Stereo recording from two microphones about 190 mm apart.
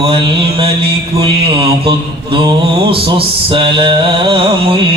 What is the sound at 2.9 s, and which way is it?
Mantra, 25° right (ahead or behind).